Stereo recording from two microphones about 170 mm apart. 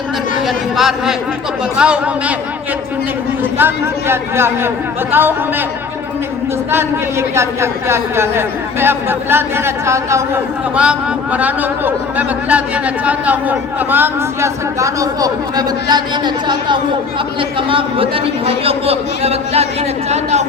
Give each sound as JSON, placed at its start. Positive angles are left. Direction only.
{"t": 0.4, "sound": "speech", "side_deg": 0}
{"t": 3.6, "sound": "speech", "side_deg": -15}
{"t": 6.7, "sound": "a man's voice", "side_deg": -15}